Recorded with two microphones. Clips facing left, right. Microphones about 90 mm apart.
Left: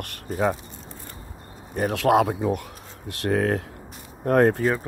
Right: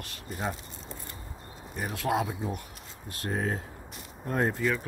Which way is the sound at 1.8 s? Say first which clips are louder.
Left 10 dB; 70° left (ahead or behind).